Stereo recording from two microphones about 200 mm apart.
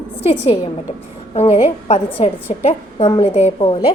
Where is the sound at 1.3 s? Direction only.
30° left (ahead or behind).